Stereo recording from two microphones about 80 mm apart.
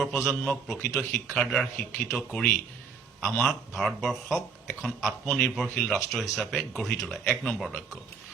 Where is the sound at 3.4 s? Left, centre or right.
Centre.